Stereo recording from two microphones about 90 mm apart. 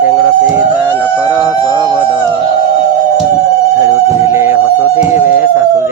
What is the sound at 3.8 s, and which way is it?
Mosquito, 35° right (ahead or behind).